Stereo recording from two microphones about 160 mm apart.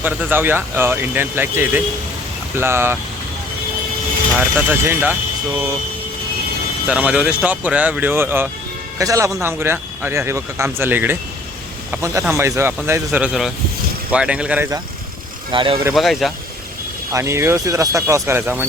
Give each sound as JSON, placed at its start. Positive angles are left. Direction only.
{"t": 0.0, "sound": "speech", "side_deg": -10}
{"t": 4.5, "sound": "speech", "side_deg": -10}
{"t": 6.8, "sound": "a man's voice", "side_deg": -10}
{"t": 15.5, "sound": "speech", "side_deg": -30}
{"t": 15.9, "sound": "a man's voice", "side_deg": 0}
{"t": 17.1, "sound": "speech", "side_deg": -20}